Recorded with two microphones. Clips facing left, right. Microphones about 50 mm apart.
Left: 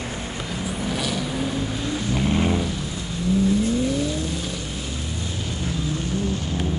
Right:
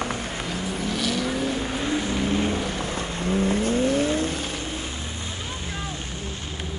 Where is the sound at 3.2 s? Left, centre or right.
Right.